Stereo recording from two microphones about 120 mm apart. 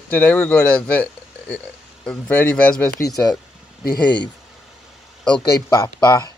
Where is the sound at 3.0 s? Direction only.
30° left (ahead or behind).